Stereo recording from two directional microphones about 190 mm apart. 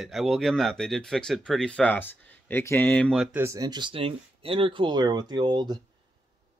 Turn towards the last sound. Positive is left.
turn(degrees=-20)  # may be behind; listen again after turning